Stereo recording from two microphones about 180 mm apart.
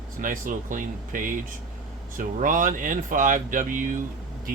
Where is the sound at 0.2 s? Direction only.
50° right (ahead or behind).